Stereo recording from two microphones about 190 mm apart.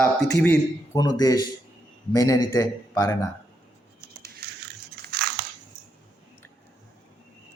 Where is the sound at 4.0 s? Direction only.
55° right (ahead or behind).